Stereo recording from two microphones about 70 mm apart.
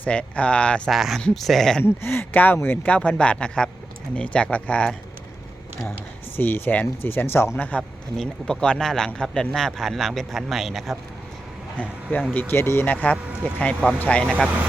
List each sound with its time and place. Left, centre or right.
0.0 s speech: centre
0.9 s speech: centre
1.8 s speech: left
6.3 s speech: left
7.6 s speech: left; by 10.9 s centre
12.3 s speech: left
12.9 s speech: left